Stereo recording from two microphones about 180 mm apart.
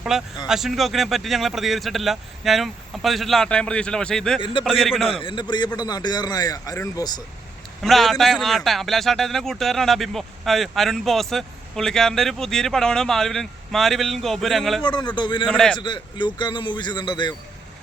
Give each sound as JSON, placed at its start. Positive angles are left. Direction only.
{"t": 0.1, "sound": "a man's voice", "side_deg": 0}
{"t": 4.4, "sound": "a man's voice", "side_deg": 25}
{"t": 4.6, "sound": "a man's voice", "side_deg": 0}
{"t": 5.2, "sound": "a man's voice", "side_deg": 25}
{"t": 7.8, "sound": "a man's voice", "side_deg": 0}
{"t": 14.8, "sound": "a man's voice", "side_deg": 25}
{"t": 15.4, "sound": "a man's voice", "side_deg": 5}
{"t": 15.8, "sound": "a man's voice", "side_deg": 25}